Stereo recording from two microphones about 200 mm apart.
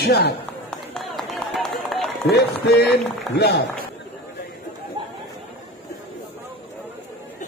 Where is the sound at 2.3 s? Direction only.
55° left (ahead or behind).